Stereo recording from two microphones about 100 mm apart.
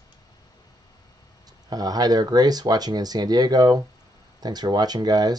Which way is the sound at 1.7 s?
40° right (ahead or behind).